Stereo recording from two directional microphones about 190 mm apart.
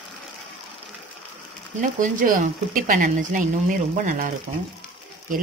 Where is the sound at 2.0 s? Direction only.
45° right (ahead or behind).